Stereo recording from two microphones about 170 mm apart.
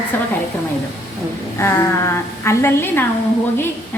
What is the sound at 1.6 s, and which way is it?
A woman's voice, 15° left (ahead or behind).